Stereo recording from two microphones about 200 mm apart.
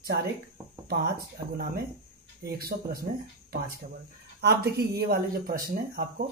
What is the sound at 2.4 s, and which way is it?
Speech, 50° right (ahead or behind).